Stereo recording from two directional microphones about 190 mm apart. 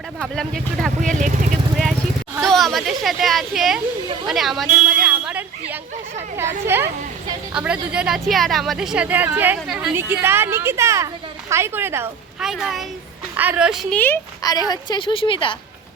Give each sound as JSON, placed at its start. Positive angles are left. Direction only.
{"t": 0.2, "sound": "speech", "side_deg": 0}
{"t": 1.0, "sound": "vehicle", "side_deg": -40}
{"t": 2.4, "sound": "speech", "side_deg": 0}
{"t": 5.0, "sound": "a sound", "side_deg": -5}
{"t": 6.7, "sound": "a woman's voice", "side_deg": -10}
{"t": 12.4, "sound": "a child's voice", "side_deg": 0}
{"t": 13.9, "sound": "a woman's voice", "side_deg": 10}